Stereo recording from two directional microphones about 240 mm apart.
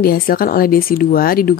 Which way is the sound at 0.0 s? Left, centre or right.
Left.